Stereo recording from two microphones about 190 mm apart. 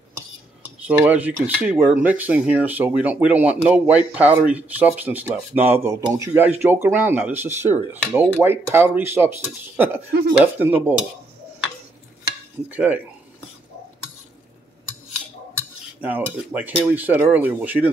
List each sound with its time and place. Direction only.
0.6 s cutlery: 10° right (ahead or behind)
12.6 s cutlery: 10° right (ahead or behind)
15.5 s cutlery: 10° right (ahead or behind)